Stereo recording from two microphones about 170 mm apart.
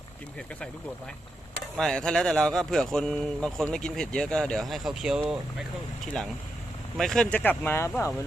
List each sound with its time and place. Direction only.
1.7 s speech: centre (ahead or behind)
6.9 s speech: centre (ahead or behind)